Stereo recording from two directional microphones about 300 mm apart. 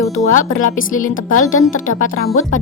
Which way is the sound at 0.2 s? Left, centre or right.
Left.